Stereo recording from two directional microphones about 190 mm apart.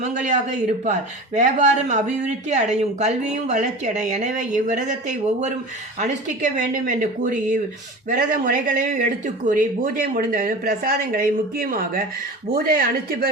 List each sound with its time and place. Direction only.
0.0 s speech: 40° right (ahead or behind)